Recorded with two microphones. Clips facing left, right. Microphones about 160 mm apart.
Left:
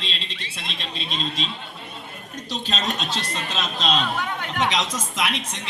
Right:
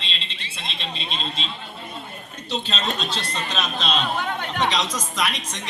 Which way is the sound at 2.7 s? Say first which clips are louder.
Left 4 dB; 45° left (ahead or behind).